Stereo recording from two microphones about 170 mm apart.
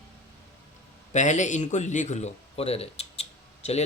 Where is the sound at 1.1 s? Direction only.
45° left (ahead or behind).